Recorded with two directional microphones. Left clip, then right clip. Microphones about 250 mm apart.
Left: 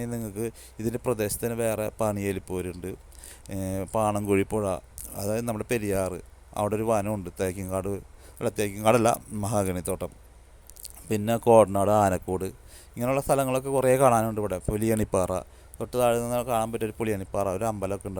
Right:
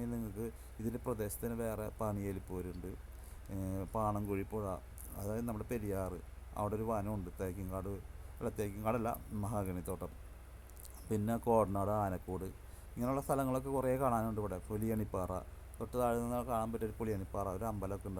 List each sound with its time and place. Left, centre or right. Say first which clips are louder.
0.0 s a man's voice: left 10 dB; left
4.3 s speech: left 15 dB; left
4.6 s a man's voice: left 13 dB; left
7.8 s a sound: left 13 dB; left
8.4 s a man's voice: left 14 dB; left